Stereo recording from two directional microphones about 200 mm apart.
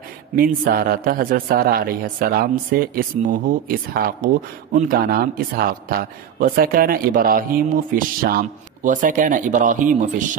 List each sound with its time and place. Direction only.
0.4 s speech: 45° right (ahead or behind)